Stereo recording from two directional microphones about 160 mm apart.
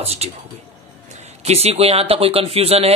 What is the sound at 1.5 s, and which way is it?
Speech, 40° right (ahead or behind).